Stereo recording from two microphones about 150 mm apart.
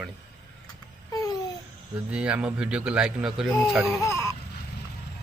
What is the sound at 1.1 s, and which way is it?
Babbling, 25° left (ahead or behind).